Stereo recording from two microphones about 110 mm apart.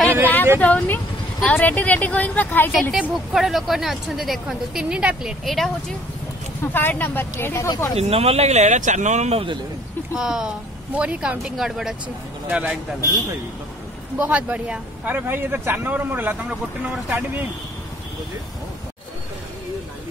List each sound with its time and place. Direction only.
0.6 s speech: 10° left (ahead or behind)
2.7 s speech: centre (ahead or behind)
6.6 s speech: 20° left (ahead or behind)
8.0 s speech: 70° right (ahead or behind)
10.1 s speech: 5° right (ahead or behind)
12.4 s speech: 15° right (ahead or behind)
14.1 s speech: 15° right (ahead or behind)